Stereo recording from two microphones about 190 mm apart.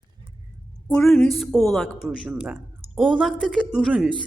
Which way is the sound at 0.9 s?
5° left (ahead or behind).